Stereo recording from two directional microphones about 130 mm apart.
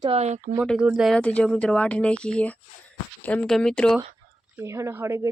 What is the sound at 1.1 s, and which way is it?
Speech, 10° left (ahead or behind).